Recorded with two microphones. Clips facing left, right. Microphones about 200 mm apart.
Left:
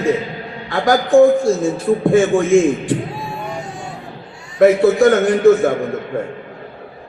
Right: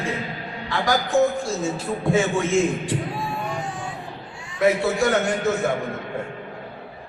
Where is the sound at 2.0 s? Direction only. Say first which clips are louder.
Left 7 dB; 50° left (ahead or behind).